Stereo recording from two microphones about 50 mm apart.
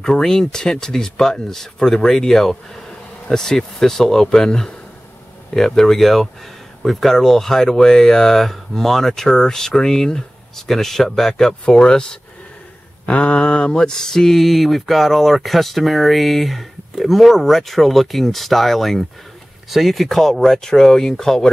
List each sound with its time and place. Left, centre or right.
0.0 s speech: centre
5.8 s speech: centre
13.0 s mantra: left; by 19.0 s centre
19.7 s speech: centre